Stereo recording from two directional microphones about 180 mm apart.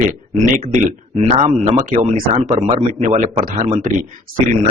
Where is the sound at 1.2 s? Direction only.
35° right (ahead or behind).